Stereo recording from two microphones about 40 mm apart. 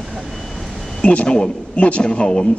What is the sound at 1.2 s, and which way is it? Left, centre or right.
Speech, left.